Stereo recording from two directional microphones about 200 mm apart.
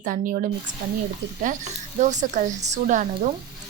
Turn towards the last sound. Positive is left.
turn(degrees=-35)  # may be behind; listen again after turning